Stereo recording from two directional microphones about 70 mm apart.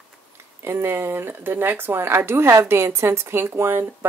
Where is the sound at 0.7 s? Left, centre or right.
Right.